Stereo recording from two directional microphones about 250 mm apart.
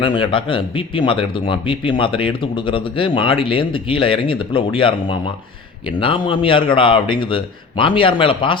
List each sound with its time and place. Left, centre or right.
0.0 s a man's voice: left